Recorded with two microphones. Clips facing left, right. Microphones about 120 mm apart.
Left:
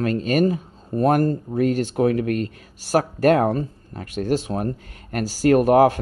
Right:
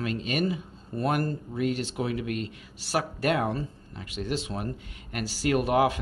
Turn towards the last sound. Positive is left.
turn(degrees=45)  # may be behind; listen again after turning